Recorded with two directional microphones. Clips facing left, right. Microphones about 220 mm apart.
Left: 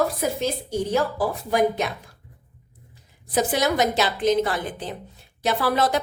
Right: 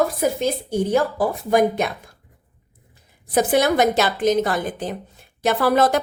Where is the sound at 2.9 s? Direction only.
55° right (ahead or behind).